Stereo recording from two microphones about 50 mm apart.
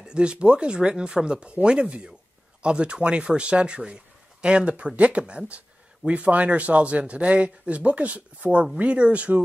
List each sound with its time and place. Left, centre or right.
0.0 s speech: centre